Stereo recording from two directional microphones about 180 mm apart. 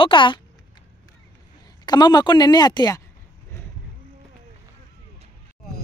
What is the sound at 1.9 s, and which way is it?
Speech, 25° left (ahead or behind).